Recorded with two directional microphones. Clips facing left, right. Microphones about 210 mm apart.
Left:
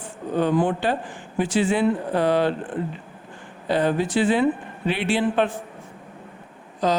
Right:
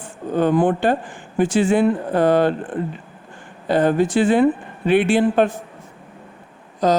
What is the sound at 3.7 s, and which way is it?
Speech, 50° right (ahead or behind).